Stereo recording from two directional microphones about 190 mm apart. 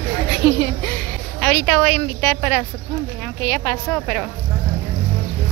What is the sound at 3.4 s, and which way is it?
Speech, 15° left (ahead or behind).